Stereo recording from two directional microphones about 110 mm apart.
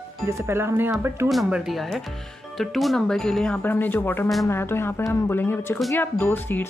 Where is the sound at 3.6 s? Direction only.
15° left (ahead or behind).